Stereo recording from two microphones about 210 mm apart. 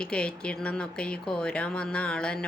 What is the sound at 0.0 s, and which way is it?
Speech, 5° left (ahead or behind).